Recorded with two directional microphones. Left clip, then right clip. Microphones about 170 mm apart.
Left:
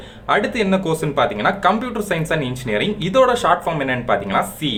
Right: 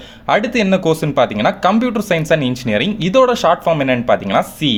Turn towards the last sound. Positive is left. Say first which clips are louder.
# right 4 dB
turn(degrees=-35)  # may be behind; listen again after turning